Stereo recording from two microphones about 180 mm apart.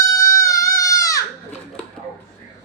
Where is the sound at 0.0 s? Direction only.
15° left (ahead or behind).